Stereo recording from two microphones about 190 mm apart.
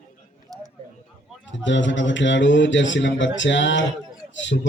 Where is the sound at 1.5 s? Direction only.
75° left (ahead or behind).